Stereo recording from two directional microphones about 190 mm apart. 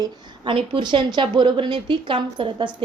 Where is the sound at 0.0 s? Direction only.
25° right (ahead or behind).